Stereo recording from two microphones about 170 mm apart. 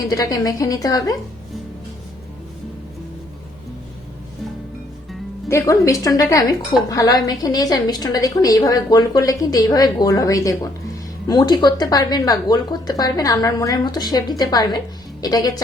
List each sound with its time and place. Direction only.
0.1 s a woman's voice: 20° left (ahead or behind)
5.5 s a woman's voice: 15° left (ahead or behind)